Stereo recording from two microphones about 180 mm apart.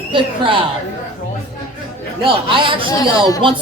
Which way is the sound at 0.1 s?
30° right (ahead or behind).